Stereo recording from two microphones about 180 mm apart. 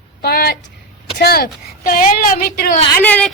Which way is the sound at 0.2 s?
60° left (ahead or behind).